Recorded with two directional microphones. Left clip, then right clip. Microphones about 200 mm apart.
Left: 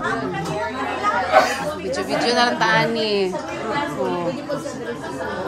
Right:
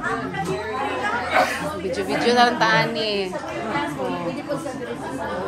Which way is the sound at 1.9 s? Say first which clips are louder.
Even; 5° left (ahead or behind).